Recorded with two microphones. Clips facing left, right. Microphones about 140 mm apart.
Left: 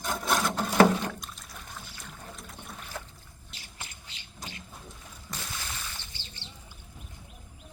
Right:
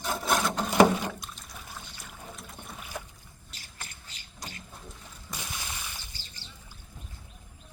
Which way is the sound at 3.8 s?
40° right (ahead or behind).